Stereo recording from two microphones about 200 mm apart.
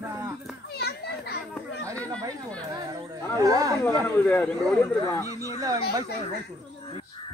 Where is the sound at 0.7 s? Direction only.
55° left (ahead or behind).